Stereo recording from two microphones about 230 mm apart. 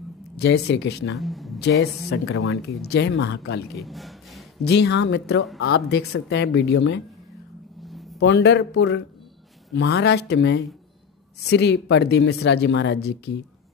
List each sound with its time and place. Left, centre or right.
0.4 s speech: left
1.1 s speech: centre
1.6 s a woman's voice: left
2.0 s speech: left
2.9 s speech: left
3.8 s speech: centre
4.6 s speech: left
7.8 s a sound: centre
8.2 s speech: left